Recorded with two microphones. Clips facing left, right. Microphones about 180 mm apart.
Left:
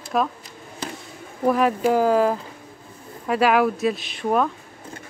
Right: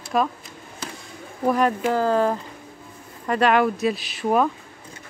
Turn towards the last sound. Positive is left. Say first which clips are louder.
# right 1 dB
turn(degrees=-5)  # may be behind; listen again after turning